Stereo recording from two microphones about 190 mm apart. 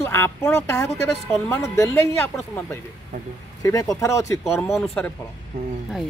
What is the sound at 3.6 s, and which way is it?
Speech, 20° left (ahead or behind).